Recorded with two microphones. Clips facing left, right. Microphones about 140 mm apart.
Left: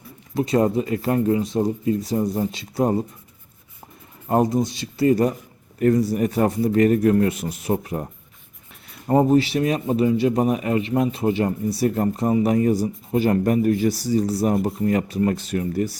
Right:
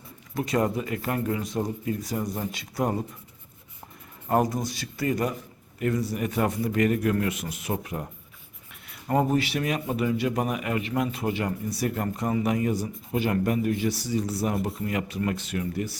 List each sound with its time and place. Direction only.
0.3 s speech: 30° left (ahead or behind)
4.3 s speech: 25° left (ahead or behind)
9.0 s speech: 30° left (ahead or behind)